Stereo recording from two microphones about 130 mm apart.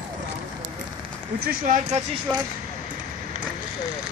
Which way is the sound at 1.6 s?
75° right (ahead or behind).